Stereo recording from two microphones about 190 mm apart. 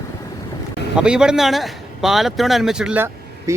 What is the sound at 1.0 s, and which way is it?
Speech, 5° right (ahead or behind).